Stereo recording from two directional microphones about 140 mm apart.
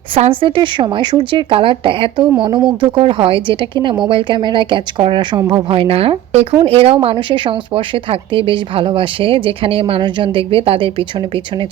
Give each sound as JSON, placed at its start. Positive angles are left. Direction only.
{"t": 0.2, "sound": "speech", "side_deg": -40}